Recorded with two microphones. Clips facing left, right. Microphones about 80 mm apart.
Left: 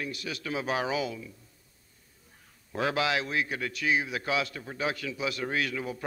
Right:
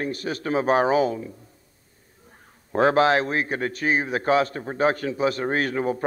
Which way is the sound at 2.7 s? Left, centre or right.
Right.